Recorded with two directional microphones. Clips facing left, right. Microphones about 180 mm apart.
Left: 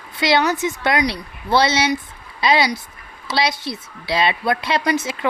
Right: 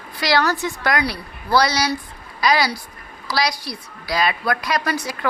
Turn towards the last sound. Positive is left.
turn(degrees=20)  # may be behind; listen again after turning